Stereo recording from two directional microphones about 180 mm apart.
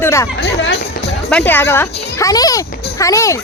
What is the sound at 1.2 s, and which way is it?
Speech, 5° left (ahead or behind).